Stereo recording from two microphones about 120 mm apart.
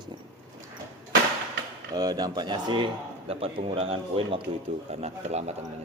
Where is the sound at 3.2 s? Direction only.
55° right (ahead or behind).